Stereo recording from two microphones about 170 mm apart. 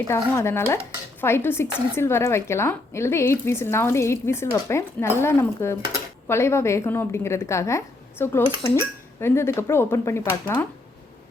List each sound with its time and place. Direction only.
0.1 s speech: 15° left (ahead or behind)